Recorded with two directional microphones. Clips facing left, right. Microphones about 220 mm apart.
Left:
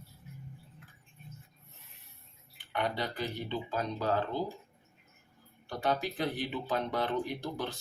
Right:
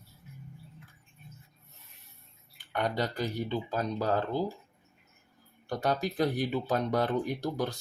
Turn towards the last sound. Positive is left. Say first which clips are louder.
# right 4 dB
turn(degrees=-40)  # may be behind; listen again after turning